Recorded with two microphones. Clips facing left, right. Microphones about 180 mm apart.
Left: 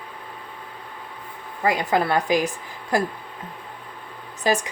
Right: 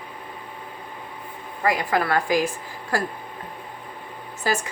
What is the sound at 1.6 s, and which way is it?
A woman's voice, 25° left (ahead or behind).